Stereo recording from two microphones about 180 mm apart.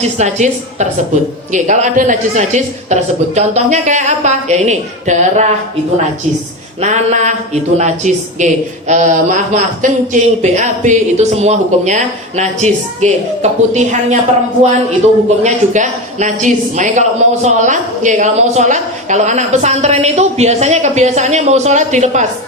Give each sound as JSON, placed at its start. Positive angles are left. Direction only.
{"t": 0.2, "sound": "a woman's voice", "side_deg": -40}
{"t": 6.8, "sound": "a woman's voice", "side_deg": -40}
{"t": 15.4, "sound": "a woman's voice", "side_deg": -40}